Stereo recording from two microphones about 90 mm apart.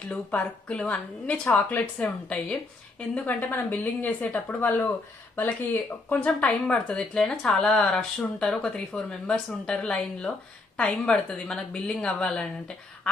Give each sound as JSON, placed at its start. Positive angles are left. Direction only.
{"t": 0.1, "sound": "speech", "side_deg": 15}